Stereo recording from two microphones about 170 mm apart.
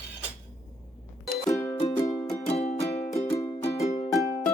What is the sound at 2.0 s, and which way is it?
Music, 15° left (ahead or behind).